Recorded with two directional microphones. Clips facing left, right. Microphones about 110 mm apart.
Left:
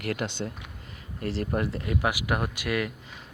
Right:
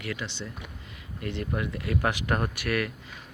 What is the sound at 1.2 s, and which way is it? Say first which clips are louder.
Speech: left 3 dB; 40° left (ahead or behind).